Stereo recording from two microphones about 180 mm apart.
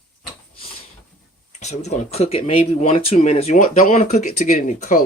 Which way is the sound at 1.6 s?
40° left (ahead or behind).